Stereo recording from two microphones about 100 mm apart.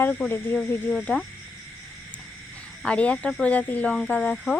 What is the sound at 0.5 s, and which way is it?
Speech, 5° left (ahead or behind).